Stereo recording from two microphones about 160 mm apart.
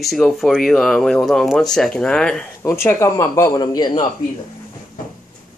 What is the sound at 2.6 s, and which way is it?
A man's voice, 15° left (ahead or behind).